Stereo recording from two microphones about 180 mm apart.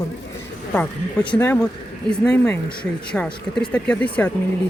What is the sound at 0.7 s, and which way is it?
Speech, 10° left (ahead or behind).